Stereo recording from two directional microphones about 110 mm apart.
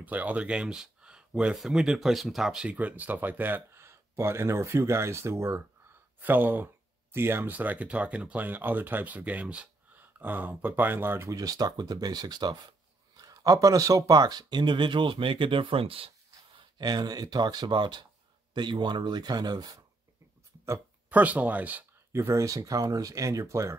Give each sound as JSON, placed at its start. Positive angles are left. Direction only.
{"t": 0.0, "sound": "speech", "side_deg": -15}
{"t": 11.3, "sound": "speech", "side_deg": -35}
{"t": 16.5, "sound": "speech", "side_deg": -40}
{"t": 21.1, "sound": "speech", "side_deg": -15}